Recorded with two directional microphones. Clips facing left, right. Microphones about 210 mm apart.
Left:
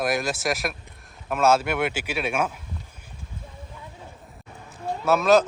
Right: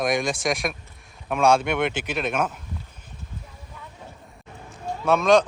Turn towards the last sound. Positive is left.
turn(degrees=5)  # may be behind; listen again after turning